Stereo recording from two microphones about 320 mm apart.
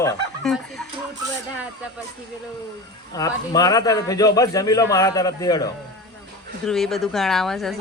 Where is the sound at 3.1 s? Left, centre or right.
Centre.